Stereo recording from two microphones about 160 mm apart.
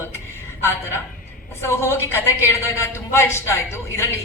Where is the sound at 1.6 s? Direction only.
15° left (ahead or behind).